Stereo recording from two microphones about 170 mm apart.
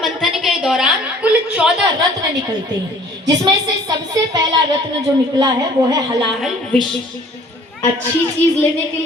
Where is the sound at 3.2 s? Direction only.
25° right (ahead or behind).